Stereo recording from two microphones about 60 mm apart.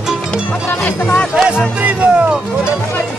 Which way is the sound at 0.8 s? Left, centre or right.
Left.